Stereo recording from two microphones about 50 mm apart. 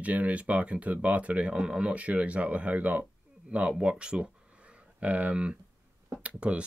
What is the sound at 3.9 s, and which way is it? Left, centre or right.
Speech, centre.